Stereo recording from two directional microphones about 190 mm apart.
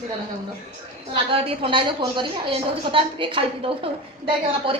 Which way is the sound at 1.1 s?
30° right (ahead or behind).